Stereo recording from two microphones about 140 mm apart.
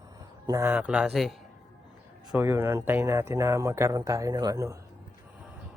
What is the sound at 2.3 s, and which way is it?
Speech, 15° right (ahead or behind).